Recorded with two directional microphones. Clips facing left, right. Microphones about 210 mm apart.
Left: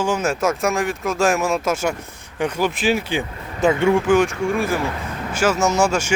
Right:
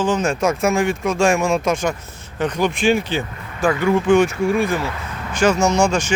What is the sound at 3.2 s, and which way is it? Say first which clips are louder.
Speech: left 1 dB; 20° left (ahead or behind).